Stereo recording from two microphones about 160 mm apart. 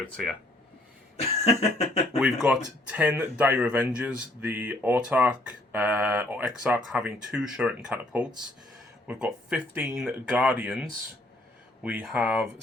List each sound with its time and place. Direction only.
0.0 s speech: centre (ahead or behind)
1.1 s cough: 40° left (ahead or behind)
2.1 s speech: 5° right (ahead or behind)